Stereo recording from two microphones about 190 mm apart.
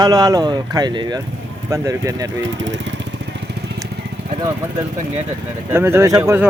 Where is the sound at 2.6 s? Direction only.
70° right (ahead or behind).